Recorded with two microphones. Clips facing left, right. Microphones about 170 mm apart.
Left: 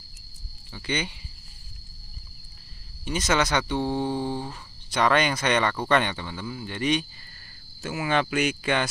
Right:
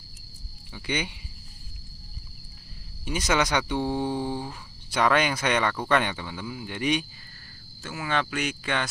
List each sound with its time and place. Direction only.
0.7 s speech: 10° right (ahead or behind)
3.1 s speech: 10° right (ahead or behind)
7.8 s speech: 10° left (ahead or behind)